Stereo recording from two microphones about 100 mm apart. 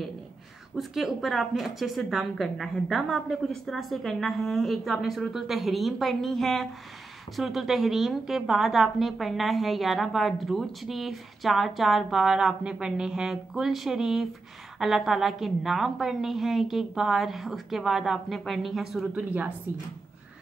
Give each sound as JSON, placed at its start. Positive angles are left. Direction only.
{"t": 0.7, "sound": "speech", "side_deg": 0}
{"t": 19.2, "sound": "a woman's voice", "side_deg": -15}